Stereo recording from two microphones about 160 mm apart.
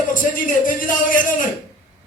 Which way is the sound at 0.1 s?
55° left (ahead or behind).